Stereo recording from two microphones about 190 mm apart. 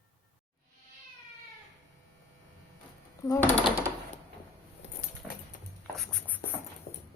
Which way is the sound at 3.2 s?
15° left (ahead or behind).